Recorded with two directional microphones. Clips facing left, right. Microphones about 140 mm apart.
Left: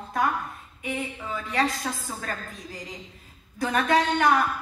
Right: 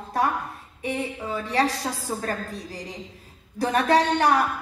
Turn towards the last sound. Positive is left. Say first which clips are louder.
# right 2 dB
turn(degrees=-35)  # may be behind; listen again after turning